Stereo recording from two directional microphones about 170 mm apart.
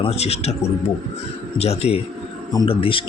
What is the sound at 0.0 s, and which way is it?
Speech, 35° left (ahead or behind).